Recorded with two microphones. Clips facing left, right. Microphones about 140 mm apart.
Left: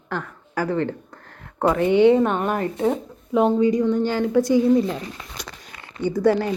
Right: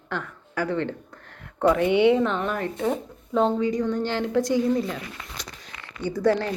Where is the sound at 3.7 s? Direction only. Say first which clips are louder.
Left 5 dB; 5° left (ahead or behind).